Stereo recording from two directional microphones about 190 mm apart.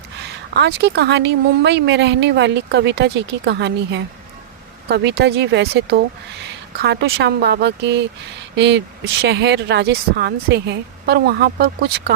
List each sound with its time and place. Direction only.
0.2 s speech: 60° right (ahead or behind)